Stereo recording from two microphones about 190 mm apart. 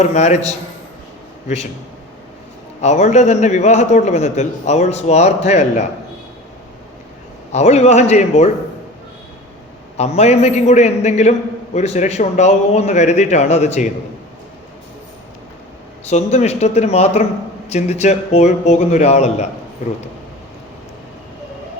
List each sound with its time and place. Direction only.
0.0 s a man's voice: 35° left (ahead or behind)
2.8 s a man's voice: 40° left (ahead or behind)
7.5 s a man's voice: 35° left (ahead or behind)
10.0 s a man's voice: 35° left (ahead or behind)
16.0 s a man's voice: 35° left (ahead or behind)